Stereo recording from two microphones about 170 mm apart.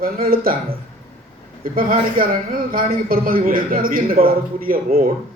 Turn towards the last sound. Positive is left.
turn(degrees=-60)  # may be behind; listen again after turning